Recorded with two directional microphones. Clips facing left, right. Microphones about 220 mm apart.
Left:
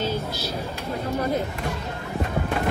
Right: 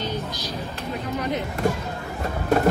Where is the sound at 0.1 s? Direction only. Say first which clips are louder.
Left 2 dB; 15° right (ahead or behind).